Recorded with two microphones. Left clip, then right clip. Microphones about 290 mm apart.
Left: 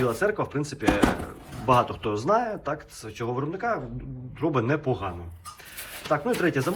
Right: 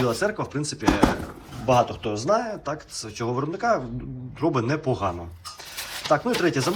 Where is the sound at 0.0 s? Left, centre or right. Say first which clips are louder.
Even; centre.